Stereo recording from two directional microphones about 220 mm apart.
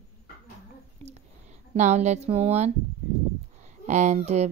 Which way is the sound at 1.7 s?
30° right (ahead or behind).